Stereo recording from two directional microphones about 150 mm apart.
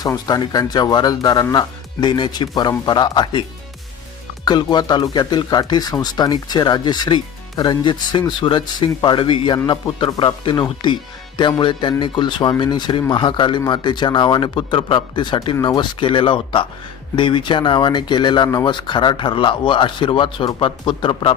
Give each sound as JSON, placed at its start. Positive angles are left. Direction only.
{"t": 0.3, "sound": "speech", "side_deg": 25}
{"t": 4.4, "sound": "speech", "side_deg": 30}